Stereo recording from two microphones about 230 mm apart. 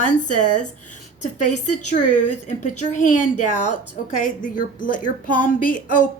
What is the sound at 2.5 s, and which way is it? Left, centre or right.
A woman's voice, left.